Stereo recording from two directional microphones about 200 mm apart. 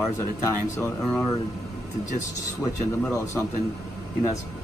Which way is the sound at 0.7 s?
10° left (ahead or behind).